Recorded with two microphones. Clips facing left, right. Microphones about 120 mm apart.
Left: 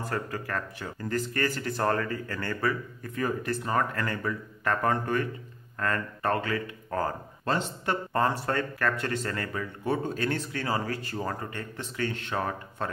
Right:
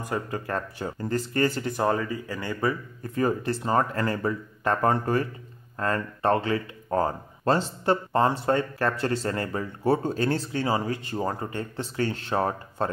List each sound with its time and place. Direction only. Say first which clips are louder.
0.0 s speech: right 2 dB; 15° right (ahead or behind)
0.5 s speech: right 4 dB; 30° right (ahead or behind)
3.0 s speech: right 5 dB; 30° right (ahead or behind)